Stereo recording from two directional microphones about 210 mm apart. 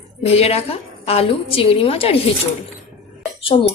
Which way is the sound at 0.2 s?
30° left (ahead or behind).